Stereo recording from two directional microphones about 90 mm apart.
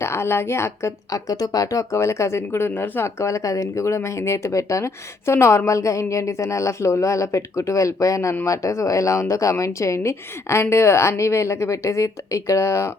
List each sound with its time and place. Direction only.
0.0 s speech: 30° left (ahead or behind)